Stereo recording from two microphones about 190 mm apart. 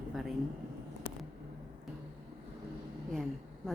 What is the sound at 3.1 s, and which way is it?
Speech, centre (ahead or behind).